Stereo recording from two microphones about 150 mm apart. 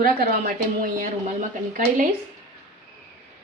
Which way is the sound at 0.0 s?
70° right (ahead or behind).